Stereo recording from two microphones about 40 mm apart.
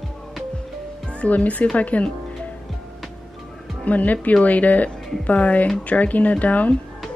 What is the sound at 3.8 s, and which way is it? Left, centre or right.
A child's voice, left.